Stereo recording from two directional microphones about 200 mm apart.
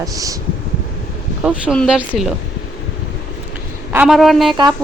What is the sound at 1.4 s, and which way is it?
Speech, 5° right (ahead or behind).